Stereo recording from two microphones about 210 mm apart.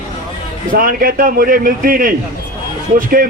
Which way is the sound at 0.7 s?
40° right (ahead or behind).